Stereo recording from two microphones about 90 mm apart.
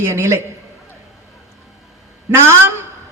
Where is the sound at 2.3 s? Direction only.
30° right (ahead or behind).